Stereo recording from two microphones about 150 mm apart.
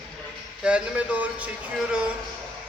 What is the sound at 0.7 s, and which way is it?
Speech, 10° right (ahead or behind).